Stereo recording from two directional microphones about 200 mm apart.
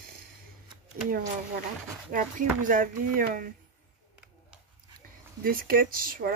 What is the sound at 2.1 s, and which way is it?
Speech, 40° right (ahead or behind).